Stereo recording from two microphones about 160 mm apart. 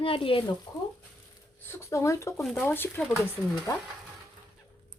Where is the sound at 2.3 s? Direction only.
Centre (ahead or behind).